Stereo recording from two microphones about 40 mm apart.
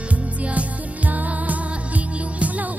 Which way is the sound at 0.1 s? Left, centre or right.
Right.